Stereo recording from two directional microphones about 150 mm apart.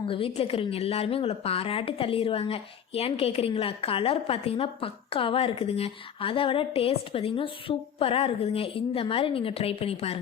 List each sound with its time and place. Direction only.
0.1 s a woman's voice: 40° left (ahead or behind)